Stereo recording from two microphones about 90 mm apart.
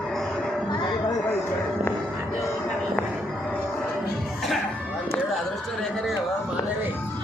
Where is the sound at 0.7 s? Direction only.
55° left (ahead or behind).